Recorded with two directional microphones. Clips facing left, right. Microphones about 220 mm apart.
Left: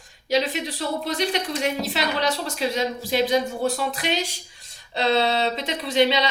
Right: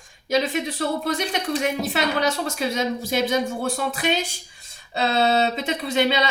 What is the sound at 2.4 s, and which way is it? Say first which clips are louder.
Speech: right 1 dB; 50° right (ahead or behind).